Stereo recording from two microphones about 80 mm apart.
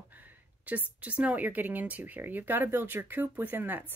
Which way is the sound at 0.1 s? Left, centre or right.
Right.